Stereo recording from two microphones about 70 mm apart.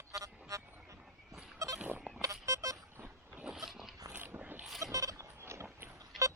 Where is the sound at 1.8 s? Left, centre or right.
Right.